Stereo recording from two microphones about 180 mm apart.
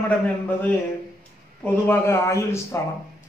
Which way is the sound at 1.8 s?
15° left (ahead or behind).